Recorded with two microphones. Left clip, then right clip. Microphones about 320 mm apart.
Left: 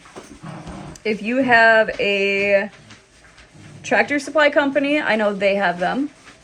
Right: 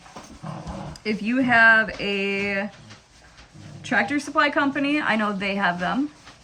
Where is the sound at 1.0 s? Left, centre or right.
Left.